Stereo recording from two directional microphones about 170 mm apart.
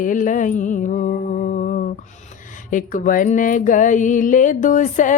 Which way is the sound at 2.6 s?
50° left (ahead or behind).